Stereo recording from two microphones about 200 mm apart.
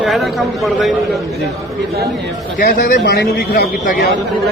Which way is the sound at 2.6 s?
45° left (ahead or behind).